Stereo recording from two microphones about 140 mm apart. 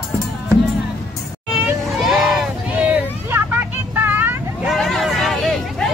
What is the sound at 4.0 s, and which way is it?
Vehicle, 15° right (ahead or behind).